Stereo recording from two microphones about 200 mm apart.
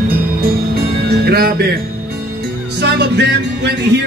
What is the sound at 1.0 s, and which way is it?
Music, 50° right (ahead or behind).